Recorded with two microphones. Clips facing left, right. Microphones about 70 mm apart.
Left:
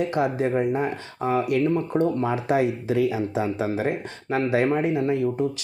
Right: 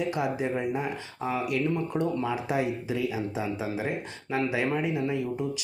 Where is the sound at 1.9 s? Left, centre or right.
Left.